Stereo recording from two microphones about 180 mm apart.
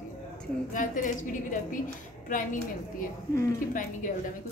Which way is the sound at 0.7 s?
45° left (ahead or behind).